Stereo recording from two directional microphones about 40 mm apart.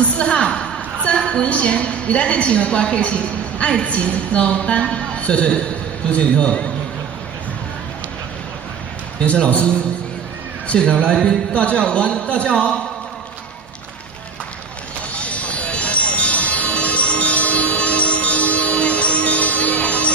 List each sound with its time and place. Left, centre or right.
0.2 s a sound: left
1.5 s a woman's voice: left
9.2 s a man's voice: left
10.8 s a woman's voice: left
15.0 s music: left